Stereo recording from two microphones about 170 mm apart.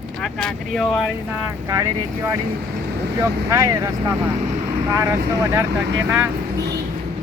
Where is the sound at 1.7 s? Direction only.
15° right (ahead or behind).